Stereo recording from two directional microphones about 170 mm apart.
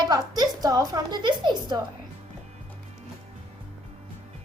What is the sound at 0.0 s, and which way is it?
Speech, 25° right (ahead or behind).